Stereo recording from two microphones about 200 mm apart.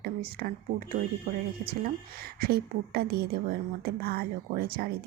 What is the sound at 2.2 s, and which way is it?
Speech, 50° right (ahead or behind).